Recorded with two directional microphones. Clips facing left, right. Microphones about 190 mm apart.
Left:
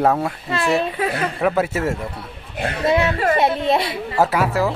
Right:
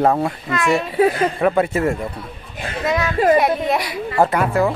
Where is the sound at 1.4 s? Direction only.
5° left (ahead or behind).